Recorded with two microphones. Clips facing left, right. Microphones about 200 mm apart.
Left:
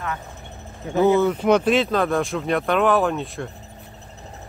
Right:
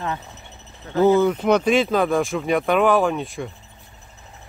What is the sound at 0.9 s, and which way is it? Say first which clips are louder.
Speech: right 1 dB; 15° left (ahead or behind).